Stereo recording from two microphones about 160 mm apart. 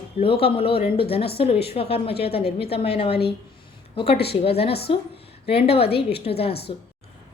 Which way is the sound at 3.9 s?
35° left (ahead or behind).